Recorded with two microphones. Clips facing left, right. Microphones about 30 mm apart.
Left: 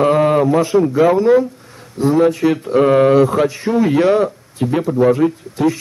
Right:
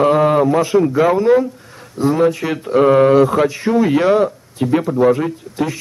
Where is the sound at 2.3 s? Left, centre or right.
Centre.